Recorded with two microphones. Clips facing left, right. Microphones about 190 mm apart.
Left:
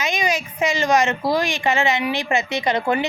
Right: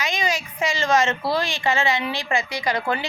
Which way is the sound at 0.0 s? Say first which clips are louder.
Left 3 dB; 20° left (ahead or behind).